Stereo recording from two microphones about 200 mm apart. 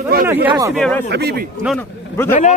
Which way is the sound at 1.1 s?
55° right (ahead or behind).